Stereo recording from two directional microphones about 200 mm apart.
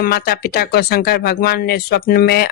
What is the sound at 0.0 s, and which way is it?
Speech, 50° left (ahead or behind).